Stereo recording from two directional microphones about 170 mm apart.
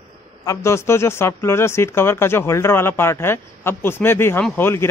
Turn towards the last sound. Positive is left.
turn(degrees=10)  # may be behind; listen again after turning